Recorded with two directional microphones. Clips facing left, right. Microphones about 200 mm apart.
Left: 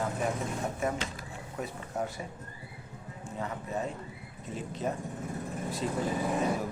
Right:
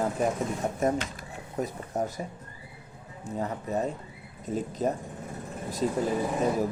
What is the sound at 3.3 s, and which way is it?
Speech, 40° right (ahead or behind).